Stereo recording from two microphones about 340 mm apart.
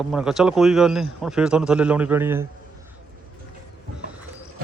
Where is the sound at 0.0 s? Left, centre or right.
Centre.